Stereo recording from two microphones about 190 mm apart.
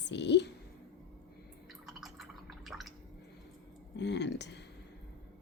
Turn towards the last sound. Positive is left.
turn(degrees=65)  # may be behind; listen again after turning